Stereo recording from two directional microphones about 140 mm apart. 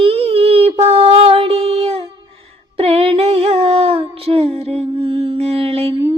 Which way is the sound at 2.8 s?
45° right (ahead or behind).